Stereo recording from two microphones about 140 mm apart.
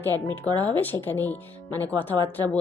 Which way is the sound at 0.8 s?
15° left (ahead or behind).